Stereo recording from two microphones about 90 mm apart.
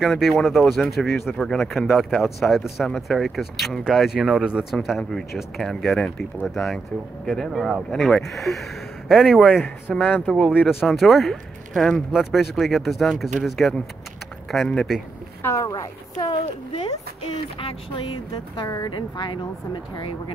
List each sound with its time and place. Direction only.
0.0 s speech: centre (ahead or behind)
4.7 s speech: 5° left (ahead or behind)
9.9 s speech: 15° left (ahead or behind)
10.5 s speech: 5° right (ahead or behind)
15.4 s speech: 35° left (ahead or behind)
15.7 s speech: 45° left (ahead or behind)
16.3 s speech: 70° left (ahead or behind)
17.6 s a sound: 90° left
18.9 s speech: 60° left (ahead or behind)